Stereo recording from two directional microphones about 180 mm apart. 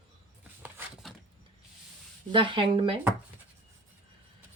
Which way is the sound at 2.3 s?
25° right (ahead or behind).